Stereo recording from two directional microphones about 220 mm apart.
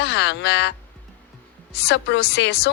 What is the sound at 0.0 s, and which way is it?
Speech, 50° left (ahead or behind).